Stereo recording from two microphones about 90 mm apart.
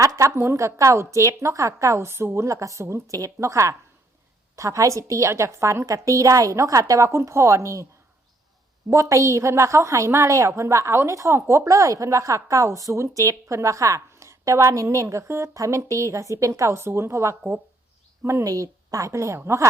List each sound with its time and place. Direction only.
0.0 s a woman's voice: 35° right (ahead or behind)
8.9 s a woman's voice: 35° right (ahead or behind)